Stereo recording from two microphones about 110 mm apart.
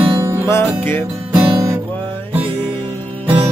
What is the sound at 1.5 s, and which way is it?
Music, 30° right (ahead or behind).